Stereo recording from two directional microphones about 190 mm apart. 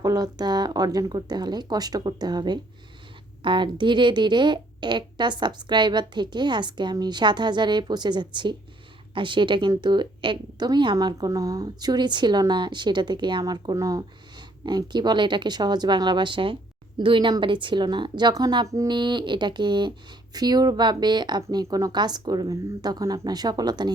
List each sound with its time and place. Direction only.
0.0 s a woman's voice: 20° right (ahead or behind)